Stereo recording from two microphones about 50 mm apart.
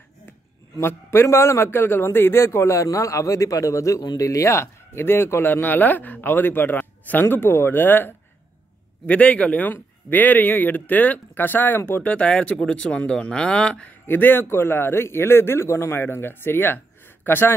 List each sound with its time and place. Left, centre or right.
0.7 s a man's voice: left
5.5 s a man's voice: left
9.0 s a man's voice: left
14.0 s a man's voice: left